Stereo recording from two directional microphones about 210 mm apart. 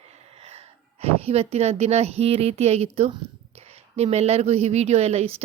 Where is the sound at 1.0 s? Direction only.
30° right (ahead or behind).